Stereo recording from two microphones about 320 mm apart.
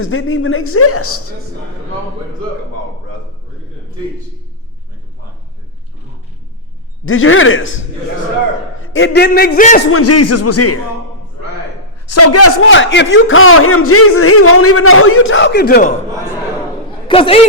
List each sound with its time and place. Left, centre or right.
0.0 s a man's voice: left
7.0 s a man's voice: left
8.8 s a man's voice: left
9.9 s speech: left
12.0 s a man's voice: left
17.1 s speech: centre